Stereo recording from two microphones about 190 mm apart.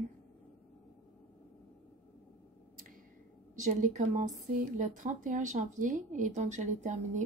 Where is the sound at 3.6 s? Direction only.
40° right (ahead or behind).